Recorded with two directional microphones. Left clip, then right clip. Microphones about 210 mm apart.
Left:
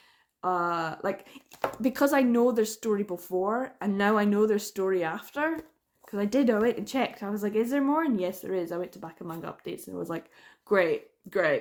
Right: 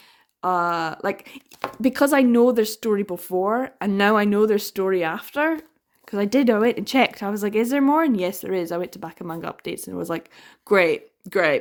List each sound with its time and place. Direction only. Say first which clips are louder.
0.4 s speech: right 6 dB; 45° right (ahead or behind)